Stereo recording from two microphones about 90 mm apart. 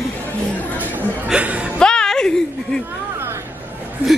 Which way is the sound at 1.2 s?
15° right (ahead or behind).